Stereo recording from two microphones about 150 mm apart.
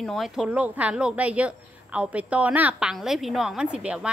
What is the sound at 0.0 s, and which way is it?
A woman's voice, centre (ahead or behind).